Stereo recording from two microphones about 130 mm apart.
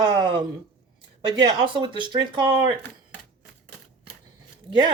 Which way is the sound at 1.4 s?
35° right (ahead or behind).